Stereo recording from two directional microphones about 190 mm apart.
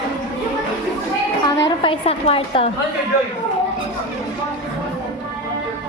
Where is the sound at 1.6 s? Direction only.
25° left (ahead or behind).